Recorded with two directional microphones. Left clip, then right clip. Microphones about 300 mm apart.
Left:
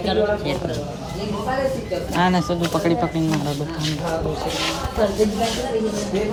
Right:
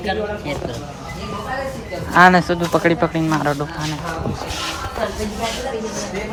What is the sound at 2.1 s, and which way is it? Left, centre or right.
Speech, centre.